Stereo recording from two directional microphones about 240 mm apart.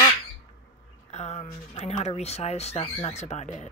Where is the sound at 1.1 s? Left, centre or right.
Left.